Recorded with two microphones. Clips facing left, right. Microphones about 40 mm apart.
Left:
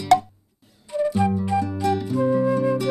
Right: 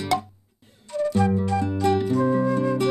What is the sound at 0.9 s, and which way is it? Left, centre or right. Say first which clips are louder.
Music: left 1 dB; centre.